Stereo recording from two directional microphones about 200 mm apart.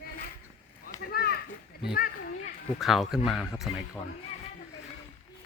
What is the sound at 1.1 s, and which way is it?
Children playing, 50° left (ahead or behind).